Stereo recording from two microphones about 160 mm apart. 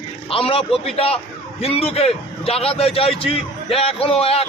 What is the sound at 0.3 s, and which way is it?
A man's voice, 35° left (ahead or behind).